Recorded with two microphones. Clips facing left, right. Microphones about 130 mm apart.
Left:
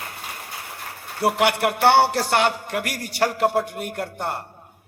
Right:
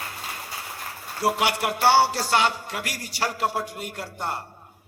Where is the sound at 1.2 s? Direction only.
60° left (ahead or behind).